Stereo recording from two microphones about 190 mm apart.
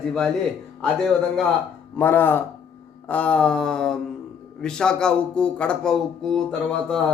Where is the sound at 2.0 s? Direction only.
10° left (ahead or behind).